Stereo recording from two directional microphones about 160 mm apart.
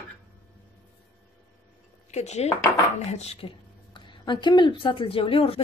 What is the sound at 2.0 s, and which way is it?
A woman's voice, 45° left (ahead or behind).